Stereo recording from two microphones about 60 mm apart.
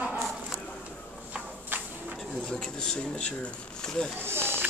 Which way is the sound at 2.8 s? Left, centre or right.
Centre.